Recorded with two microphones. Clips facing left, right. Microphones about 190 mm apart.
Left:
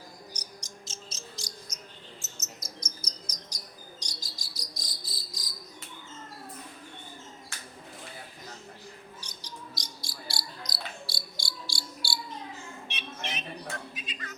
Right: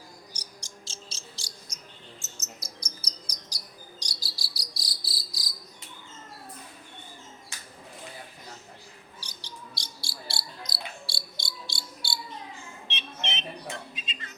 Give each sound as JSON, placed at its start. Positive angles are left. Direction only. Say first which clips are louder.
{"t": 0.3, "sound": "cricket", "louder": "left 1 dB", "side_deg": -30}
{"t": 2.8, "sound": "bird", "louder": "left 1 dB", "side_deg": -35}
{"t": 4.0, "sound": "cricket", "louder": "even", "side_deg": -35}
{"t": 9.2, "sound": "cricket", "louder": "left 1 dB", "side_deg": -30}
{"t": 12.9, "sound": "a sound", "louder": "right 2 dB", "side_deg": -25}